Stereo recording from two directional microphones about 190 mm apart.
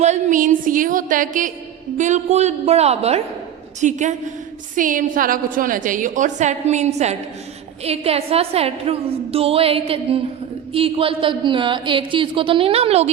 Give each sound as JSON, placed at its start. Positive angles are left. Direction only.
{"t": 0.0, "sound": "a woman's voice", "side_deg": -40}